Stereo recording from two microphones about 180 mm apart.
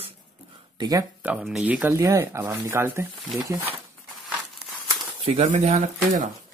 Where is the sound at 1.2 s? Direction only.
5° right (ahead or behind).